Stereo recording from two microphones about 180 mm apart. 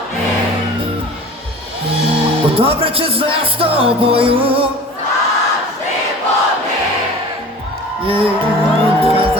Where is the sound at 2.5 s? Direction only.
30° right (ahead or behind).